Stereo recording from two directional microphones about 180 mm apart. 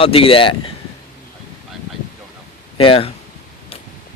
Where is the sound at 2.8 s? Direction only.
30° left (ahead or behind).